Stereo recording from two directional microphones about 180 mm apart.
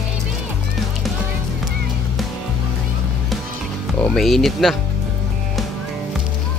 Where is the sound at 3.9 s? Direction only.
5° left (ahead or behind).